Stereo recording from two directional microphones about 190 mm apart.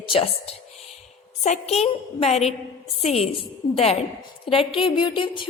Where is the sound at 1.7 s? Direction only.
35° left (ahead or behind).